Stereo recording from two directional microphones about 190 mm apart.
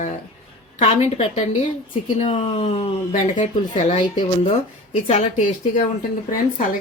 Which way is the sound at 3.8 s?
25° left (ahead or behind).